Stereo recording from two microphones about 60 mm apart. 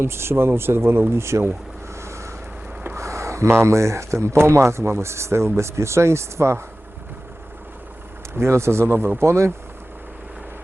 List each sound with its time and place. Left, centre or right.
0.0 s speech: right
2.0 s vehicle: right
2.8 s speech: right
8.3 s speech: right